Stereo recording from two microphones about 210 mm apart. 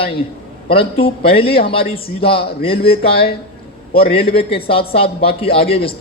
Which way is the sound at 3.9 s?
25° left (ahead or behind).